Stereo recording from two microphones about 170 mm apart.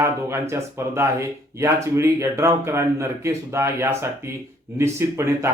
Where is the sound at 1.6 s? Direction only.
15° right (ahead or behind).